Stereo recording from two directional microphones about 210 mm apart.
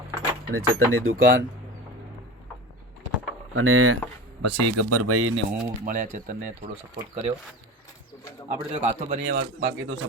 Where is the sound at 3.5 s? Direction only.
80° right.